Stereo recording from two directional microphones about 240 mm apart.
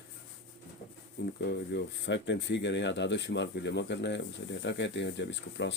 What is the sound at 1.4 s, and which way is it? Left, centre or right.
Speech, left.